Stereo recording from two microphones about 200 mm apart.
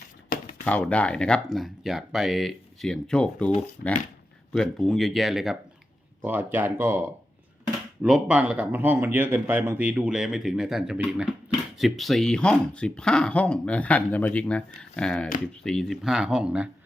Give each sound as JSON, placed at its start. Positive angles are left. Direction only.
{"t": 0.6, "sound": "speech", "side_deg": 5}
{"t": 3.8, "sound": "speech", "side_deg": 55}
{"t": 4.5, "sound": "speech", "side_deg": 0}
{"t": 8.0, "sound": "speech", "side_deg": -5}